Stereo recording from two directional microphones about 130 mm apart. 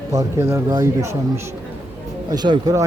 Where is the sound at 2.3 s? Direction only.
30° right (ahead or behind).